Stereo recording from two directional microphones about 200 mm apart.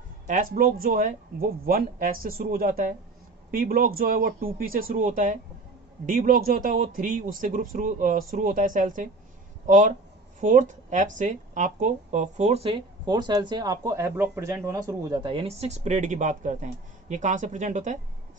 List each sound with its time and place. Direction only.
0.6 s speech: 45° right (ahead or behind)